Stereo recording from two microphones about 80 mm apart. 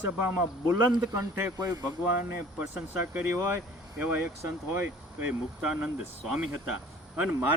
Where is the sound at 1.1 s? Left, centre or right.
Right.